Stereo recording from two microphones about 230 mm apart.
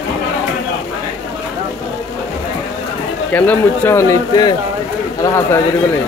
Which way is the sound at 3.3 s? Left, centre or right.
Centre.